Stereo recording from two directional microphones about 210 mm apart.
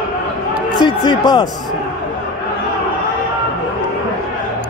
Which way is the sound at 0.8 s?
20° left (ahead or behind).